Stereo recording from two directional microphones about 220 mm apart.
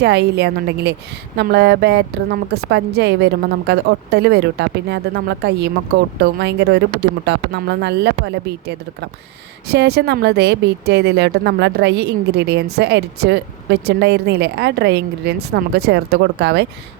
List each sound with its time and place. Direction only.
0.0 s a woman's voice: 50° right (ahead or behind)